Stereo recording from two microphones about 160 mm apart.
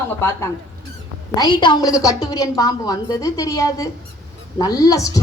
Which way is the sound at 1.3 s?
25° left (ahead or behind).